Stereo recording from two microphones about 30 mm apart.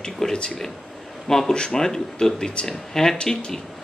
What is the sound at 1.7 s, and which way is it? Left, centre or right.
A man's voice, centre.